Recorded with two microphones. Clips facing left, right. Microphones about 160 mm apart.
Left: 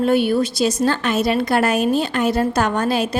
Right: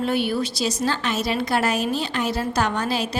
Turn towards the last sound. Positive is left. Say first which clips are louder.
# left 4 dB
turn(degrees=50)  # may be behind; listen again after turning